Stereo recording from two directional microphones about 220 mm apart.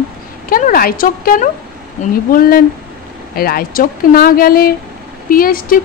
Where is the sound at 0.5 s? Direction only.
40° left (ahead or behind).